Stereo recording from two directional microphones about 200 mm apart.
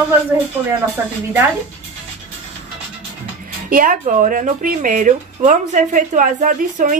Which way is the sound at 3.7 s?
40° right (ahead or behind).